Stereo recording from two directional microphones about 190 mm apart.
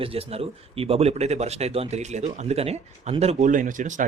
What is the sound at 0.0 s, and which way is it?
Speech, 30° right (ahead or behind).